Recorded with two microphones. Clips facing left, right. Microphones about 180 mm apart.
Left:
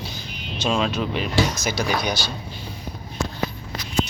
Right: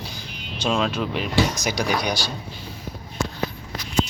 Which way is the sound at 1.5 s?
15° right (ahead or behind).